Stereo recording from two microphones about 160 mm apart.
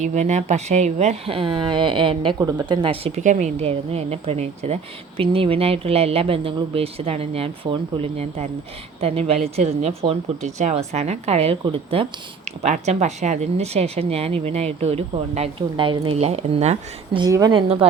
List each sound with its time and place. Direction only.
0.0 s speech: 45° right (ahead or behind)
12.6 s speech: 45° right (ahead or behind)
17.2 s a woman's voice: 25° right (ahead or behind)